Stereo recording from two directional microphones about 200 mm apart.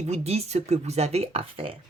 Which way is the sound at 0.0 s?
30° right (ahead or behind).